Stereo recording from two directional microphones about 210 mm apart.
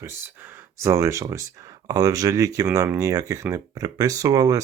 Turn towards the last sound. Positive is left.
turn(degrees=-15)  # may be behind; listen again after turning